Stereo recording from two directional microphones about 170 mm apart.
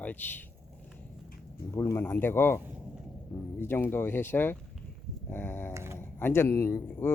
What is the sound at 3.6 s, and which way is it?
Speech, 15° left (ahead or behind).